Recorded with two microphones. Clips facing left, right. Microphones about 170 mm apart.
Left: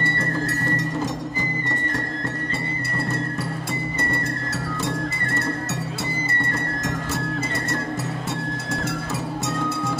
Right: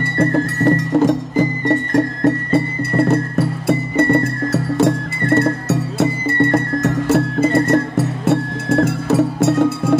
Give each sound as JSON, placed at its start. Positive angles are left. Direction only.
{"t": 0.2, "sound": "music", "side_deg": -65}